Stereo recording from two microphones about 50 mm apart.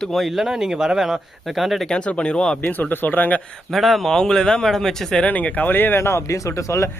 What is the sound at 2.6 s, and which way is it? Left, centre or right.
Speech, left.